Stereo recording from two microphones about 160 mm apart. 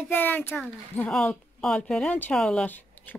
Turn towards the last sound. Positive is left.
turn(degrees=10)  # may be behind; listen again after turning